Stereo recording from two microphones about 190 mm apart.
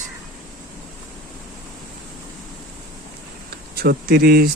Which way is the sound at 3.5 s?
55° right (ahead or behind).